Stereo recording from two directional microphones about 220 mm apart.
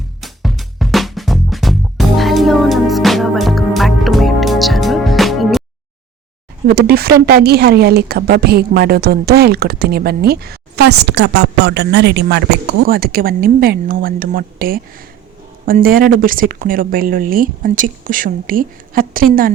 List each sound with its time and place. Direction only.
0.2 s music: centre (ahead or behind)
6.7 s speech: 45° right (ahead or behind)